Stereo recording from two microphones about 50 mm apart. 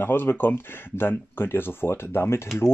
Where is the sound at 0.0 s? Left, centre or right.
Left.